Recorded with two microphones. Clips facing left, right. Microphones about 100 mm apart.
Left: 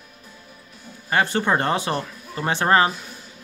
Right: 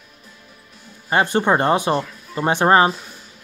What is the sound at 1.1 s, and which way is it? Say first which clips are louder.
Speech: right 3 dB; 20° right (ahead or behind).